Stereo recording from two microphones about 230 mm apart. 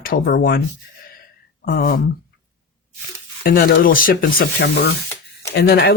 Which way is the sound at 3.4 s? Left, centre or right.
Left.